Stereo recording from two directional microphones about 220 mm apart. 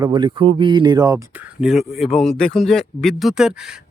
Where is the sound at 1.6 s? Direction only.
Centre (ahead or behind).